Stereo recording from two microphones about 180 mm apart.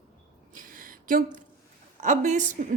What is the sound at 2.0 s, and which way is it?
Speech, 45° right (ahead or behind).